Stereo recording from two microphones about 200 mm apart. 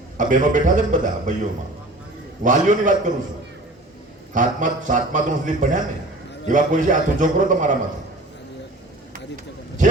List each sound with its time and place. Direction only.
0.2 s a man's voice: 40° right (ahead or behind)
4.4 s a man's voice: 40° right (ahead or behind)
9.3 s a sound: 40° right (ahead or behind)